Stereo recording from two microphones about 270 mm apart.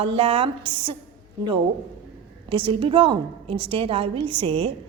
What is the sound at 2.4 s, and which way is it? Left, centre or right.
A woman's voice, centre.